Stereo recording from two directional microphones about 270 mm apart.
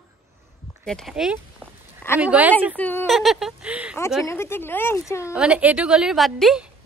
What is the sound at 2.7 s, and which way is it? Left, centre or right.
A woman's voice, centre.